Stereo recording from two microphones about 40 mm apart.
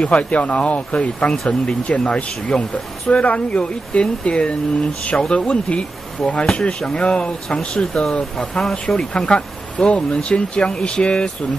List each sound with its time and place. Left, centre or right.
0.0 s speech: left